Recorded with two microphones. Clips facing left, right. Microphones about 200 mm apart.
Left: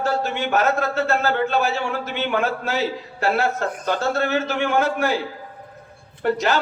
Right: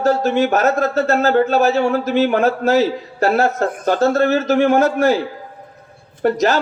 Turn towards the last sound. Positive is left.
turn(degrees=-40)  # may be behind; listen again after turning